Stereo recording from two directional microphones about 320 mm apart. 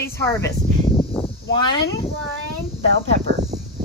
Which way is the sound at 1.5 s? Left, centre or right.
Centre.